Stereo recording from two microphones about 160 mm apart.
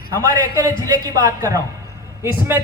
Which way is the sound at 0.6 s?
20° right (ahead or behind).